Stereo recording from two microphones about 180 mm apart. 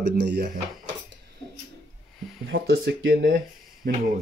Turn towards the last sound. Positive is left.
turn(degrees=-50)  # may be behind; listen again after turning